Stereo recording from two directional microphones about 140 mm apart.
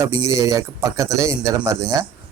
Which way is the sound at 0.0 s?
20° right (ahead or behind).